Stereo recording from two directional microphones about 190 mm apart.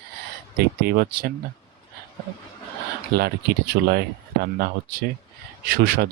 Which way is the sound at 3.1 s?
55° right (ahead or behind).